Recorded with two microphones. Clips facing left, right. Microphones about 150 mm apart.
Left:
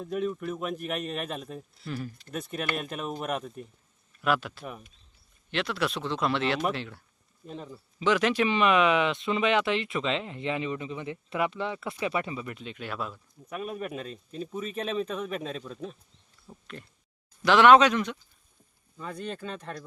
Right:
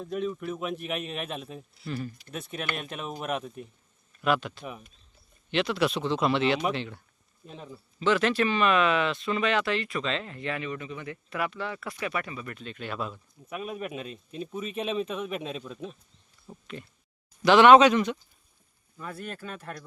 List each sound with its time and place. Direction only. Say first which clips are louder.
0.0 s speech: left 1 dB; 5° left (ahead or behind)
7.9 s speech: even; 10° left (ahead or behind)
19.2 s speech: left 5 dB; 10° right (ahead or behind)